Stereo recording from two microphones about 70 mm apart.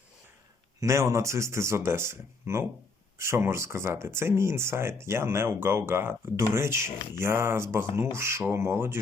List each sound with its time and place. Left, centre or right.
0.8 s speech: right